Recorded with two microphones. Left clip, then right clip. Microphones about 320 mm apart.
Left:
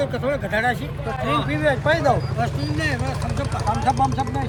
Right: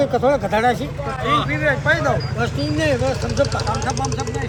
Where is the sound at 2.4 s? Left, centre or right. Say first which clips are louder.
Right 3 dB; centre.